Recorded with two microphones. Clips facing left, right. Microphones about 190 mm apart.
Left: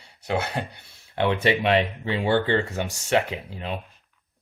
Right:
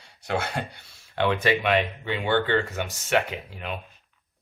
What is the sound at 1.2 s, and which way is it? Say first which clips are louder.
Speech: left 1 dB; 25° left (ahead or behind).